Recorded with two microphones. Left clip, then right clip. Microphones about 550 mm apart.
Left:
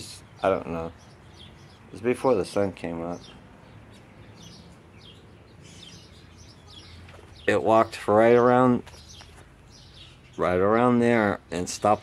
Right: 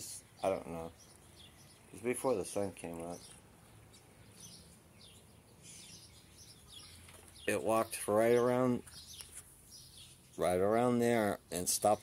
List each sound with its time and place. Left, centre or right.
0.0 s a sound: right
2.0 s speech: right
7.4 s speech: right
10.3 s speech: right